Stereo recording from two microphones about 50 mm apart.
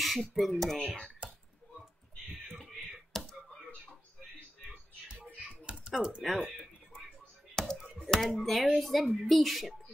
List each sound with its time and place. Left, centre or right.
0.0 s a woman's voice: centre
1.2 s a sound: right
3.1 s a sound: centre
5.0 s typing: centre
7.6 s computer keyboard: centre
8.1 s a woman's voice: centre